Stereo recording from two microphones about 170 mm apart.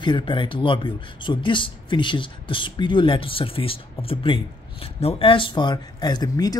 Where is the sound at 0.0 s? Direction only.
30° left (ahead or behind).